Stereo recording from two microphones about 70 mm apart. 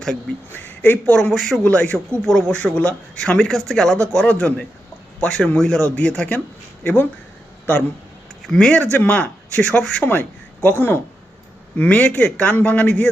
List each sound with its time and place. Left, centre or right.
0.5 s a man's voice: left
1.1 s speech: centre
1.6 s a man's voice: centre
8.4 s speech: centre
8.8 s a man's voice: left
10.1 s speech: left
11.8 s a man's voice: centre